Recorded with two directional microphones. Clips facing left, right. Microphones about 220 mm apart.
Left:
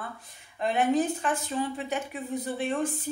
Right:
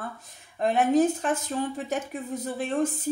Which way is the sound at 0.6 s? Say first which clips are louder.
Right 3 dB; 45° right (ahead or behind).